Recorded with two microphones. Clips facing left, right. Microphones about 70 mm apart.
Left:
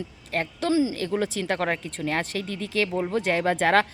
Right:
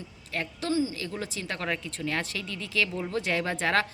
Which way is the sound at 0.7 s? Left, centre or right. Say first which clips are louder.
Left 5 dB; left.